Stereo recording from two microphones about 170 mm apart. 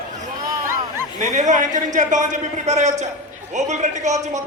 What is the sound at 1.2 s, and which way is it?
A man's voice, 45° right (ahead or behind).